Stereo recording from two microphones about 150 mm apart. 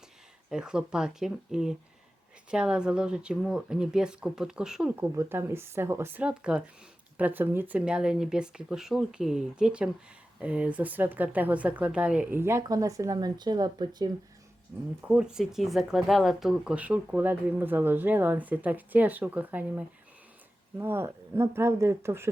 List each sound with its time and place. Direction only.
0.5 s speech: 5° right (ahead or behind); by 14.1 s 30° right (ahead or behind)
15.0 s speech: 5° right (ahead or behind)